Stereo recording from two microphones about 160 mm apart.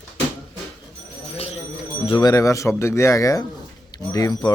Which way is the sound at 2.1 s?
25° left (ahead or behind).